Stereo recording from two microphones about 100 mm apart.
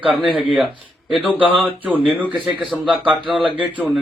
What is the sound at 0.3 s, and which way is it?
Speech, 65° left (ahead or behind).